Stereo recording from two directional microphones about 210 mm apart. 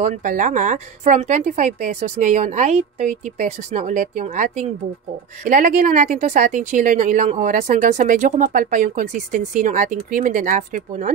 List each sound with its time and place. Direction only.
0.0 s speech: 40° right (ahead or behind)